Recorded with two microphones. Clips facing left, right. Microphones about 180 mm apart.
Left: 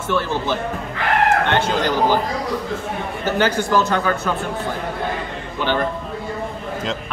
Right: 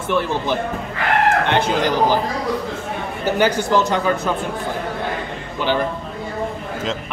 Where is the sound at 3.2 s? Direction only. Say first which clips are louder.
Right 2 dB; 15° right (ahead or behind).